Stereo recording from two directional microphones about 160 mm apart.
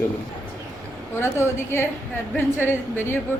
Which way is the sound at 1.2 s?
15° left (ahead or behind).